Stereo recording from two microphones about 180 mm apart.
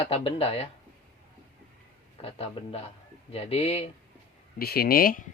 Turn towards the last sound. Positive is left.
turn(degrees=50)  # may be behind; listen again after turning